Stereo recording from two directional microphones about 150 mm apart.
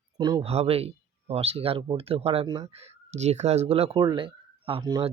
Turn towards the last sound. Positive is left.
turn(degrees=-30)  # may be behind; listen again after turning